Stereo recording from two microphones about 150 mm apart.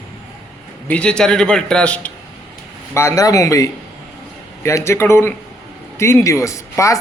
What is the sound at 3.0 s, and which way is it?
A man's voice, 20° left (ahead or behind).